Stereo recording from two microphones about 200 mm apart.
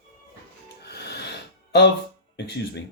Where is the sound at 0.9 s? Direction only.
55° left (ahead or behind).